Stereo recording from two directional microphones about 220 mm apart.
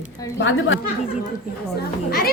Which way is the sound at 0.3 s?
60° left (ahead or behind).